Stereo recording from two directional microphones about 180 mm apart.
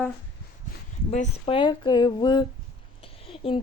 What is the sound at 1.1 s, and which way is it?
Speech, 40° left (ahead or behind).